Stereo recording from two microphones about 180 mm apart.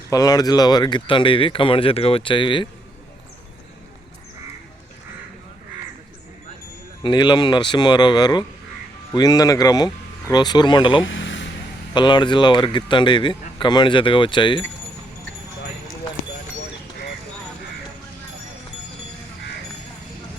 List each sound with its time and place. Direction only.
0.1 s speech: 20° left (ahead or behind)
7.0 s speech: 25° left (ahead or behind)
11.0 s a sound: 90° left
11.9 s speech: 25° left (ahead or behind)